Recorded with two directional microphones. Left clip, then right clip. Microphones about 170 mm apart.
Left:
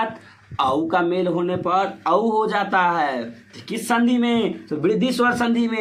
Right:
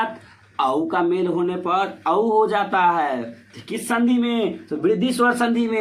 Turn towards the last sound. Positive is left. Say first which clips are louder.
# right 1 dB
turn(degrees=15)  # may be behind; listen again after turning